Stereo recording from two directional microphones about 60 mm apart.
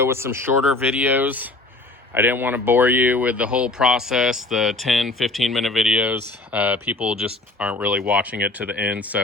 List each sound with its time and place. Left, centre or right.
0.0 s speech: right
0.9 s speech: right; by 5.9 s centre
5.9 s speech: right
6.7 s speech: right
7.0 s speech: centre